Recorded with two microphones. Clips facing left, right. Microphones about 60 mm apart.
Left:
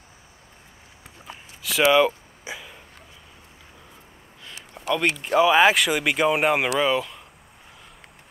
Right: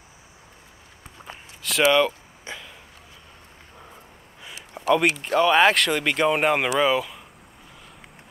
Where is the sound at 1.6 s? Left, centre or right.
Centre.